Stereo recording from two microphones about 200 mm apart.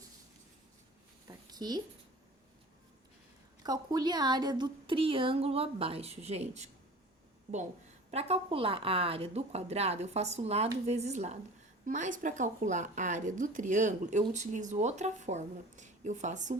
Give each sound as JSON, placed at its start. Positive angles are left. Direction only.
{"t": 1.3, "sound": "a sound", "side_deg": -20}
{"t": 3.6, "sound": "a woman's voice", "side_deg": -20}
{"t": 8.1, "sound": "speech", "side_deg": -30}